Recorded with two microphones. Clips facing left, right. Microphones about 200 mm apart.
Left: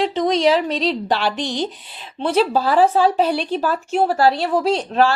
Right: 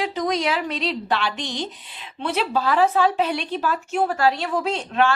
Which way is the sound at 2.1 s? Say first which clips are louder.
Left 6 dB; 30° left (ahead or behind).